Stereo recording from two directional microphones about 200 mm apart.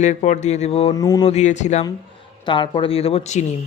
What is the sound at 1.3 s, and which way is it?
Speech, 35° left (ahead or behind).